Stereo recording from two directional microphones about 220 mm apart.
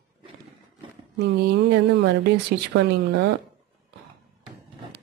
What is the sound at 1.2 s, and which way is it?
Speech, 50° right (ahead or behind).